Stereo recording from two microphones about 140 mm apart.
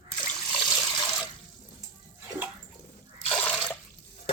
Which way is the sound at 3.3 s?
10° left (ahead or behind).